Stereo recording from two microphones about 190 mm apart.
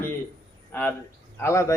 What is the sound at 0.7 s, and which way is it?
Speech, 10° left (ahead or behind).